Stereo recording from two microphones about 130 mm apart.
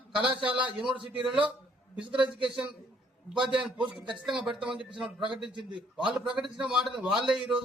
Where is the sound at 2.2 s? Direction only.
40° right (ahead or behind).